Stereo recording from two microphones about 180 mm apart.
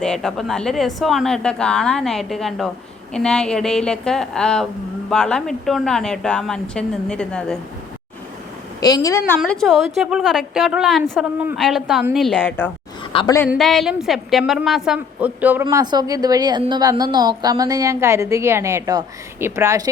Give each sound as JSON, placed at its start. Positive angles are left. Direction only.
{"t": 0.0, "sound": "a woman's voice", "side_deg": 5}
{"t": 8.8, "sound": "a woman's voice", "side_deg": 20}
{"t": 13.1, "sound": "a woman's voice", "side_deg": 20}
{"t": 13.5, "sound": "a woman's voice", "side_deg": 0}
{"t": 15.6, "sound": "a woman's voice", "side_deg": -25}